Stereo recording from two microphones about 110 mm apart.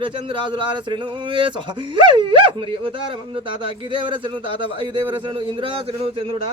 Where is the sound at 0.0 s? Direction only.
45° right (ahead or behind).